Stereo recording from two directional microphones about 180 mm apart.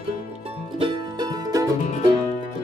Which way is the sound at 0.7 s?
25° right (ahead or behind).